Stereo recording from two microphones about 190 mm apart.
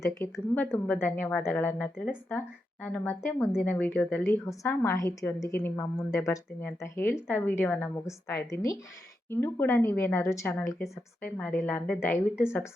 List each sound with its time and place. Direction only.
0.0 s a woman's voice: 15° left (ahead or behind)